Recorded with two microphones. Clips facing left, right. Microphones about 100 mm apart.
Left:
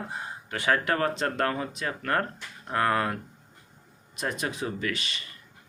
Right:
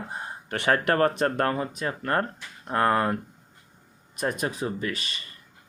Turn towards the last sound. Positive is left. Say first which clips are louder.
# right 1 dB
turn(degrees=-35)  # may be behind; listen again after turning